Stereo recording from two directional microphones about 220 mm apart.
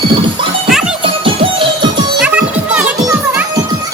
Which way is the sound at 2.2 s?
5° right (ahead or behind).